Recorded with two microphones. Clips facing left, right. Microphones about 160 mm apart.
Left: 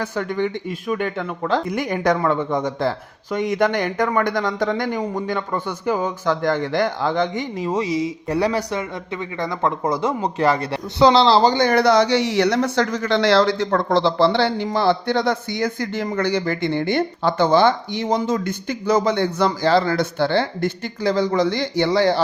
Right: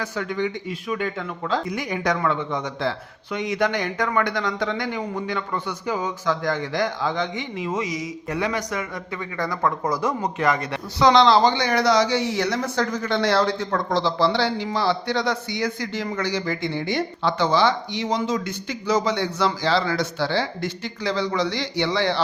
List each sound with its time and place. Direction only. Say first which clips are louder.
0.0 s a man's voice: left 3 dB; 50° left (ahead or behind)
7.6 s speech: left 6 dB; 35° left (ahead or behind)
9.4 s speech: left 2 dB; 20° left (ahead or behind)
11.5 s speech: left 4 dB; 50° left (ahead or behind); by 13.7 s 85° left
13.7 s a man's voice: left 5 dB; 60° left (ahead or behind); by 22.2 s 45° left (ahead or behind)